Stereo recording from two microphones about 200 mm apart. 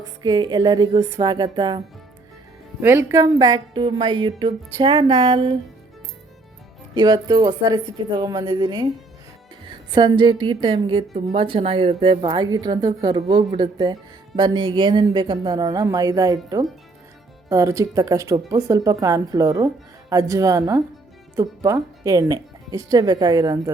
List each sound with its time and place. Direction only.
0.0 s a woman's voice: 20° right (ahead or behind)
2.8 s a woman's voice: 10° right (ahead or behind)
6.9 s a woman's voice: 20° right (ahead or behind)